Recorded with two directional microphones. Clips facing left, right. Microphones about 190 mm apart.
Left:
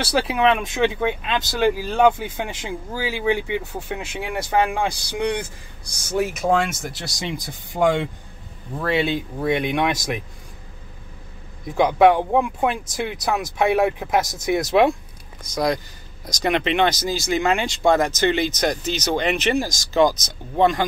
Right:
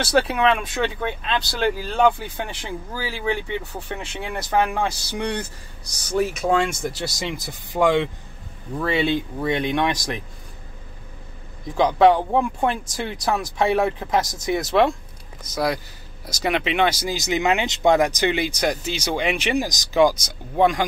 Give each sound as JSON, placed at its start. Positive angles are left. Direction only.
{"t": 0.0, "sound": "speech", "side_deg": 5}
{"t": 11.7, "sound": "speech", "side_deg": 10}
{"t": 15.5, "sound": "speech", "side_deg": -5}